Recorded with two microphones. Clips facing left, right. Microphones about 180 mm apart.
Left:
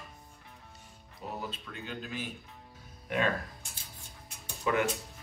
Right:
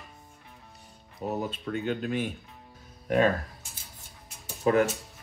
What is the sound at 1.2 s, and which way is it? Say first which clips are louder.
Speech: right 8 dB; 50° right (ahead or behind).